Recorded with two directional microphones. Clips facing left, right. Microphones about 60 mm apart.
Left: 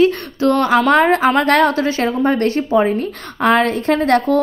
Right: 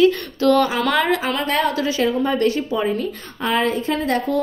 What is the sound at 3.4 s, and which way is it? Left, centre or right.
Speech, left.